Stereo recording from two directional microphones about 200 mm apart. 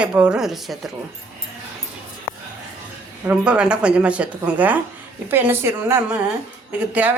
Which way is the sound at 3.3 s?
5° right (ahead or behind).